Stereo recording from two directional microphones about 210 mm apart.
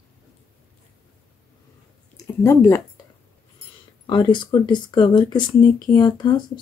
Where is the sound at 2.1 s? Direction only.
15° left (ahead or behind).